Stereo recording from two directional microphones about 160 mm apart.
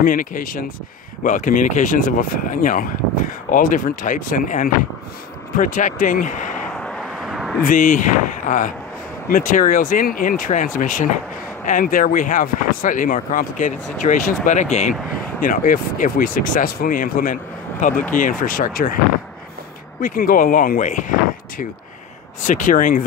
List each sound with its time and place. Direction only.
0.0 s speech: 60° left (ahead or behind)
6.8 s vehicle: centre (ahead or behind)
7.6 s speech: 55° left (ahead or behind)
15.4 s speech: 60° left (ahead or behind)
20.0 s speech: 60° left (ahead or behind)